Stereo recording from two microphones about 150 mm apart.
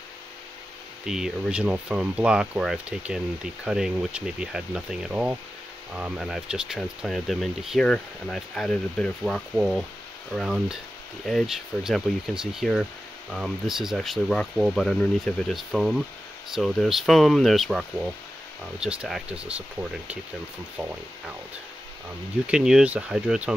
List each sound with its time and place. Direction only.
1.0 s speech: 5° right (ahead or behind)
22.5 s speech: 5° right (ahead or behind)